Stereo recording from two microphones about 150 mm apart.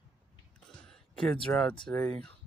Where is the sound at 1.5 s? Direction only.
15° left (ahead or behind).